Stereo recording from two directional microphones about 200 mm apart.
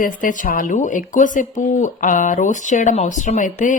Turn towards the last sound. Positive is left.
turn(degrees=40)  # may be behind; listen again after turning